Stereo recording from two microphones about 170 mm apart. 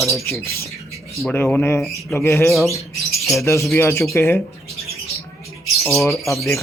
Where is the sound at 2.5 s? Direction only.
Centre (ahead or behind).